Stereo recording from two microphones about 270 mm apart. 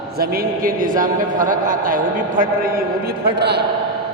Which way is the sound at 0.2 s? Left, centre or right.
Right.